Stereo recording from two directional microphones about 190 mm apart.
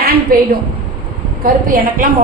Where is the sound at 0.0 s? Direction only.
55° right (ahead or behind).